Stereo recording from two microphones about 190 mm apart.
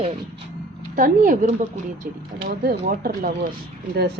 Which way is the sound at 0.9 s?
45° right (ahead or behind).